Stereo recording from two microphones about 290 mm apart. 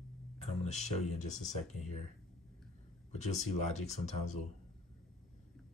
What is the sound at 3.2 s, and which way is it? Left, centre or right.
Speech, left.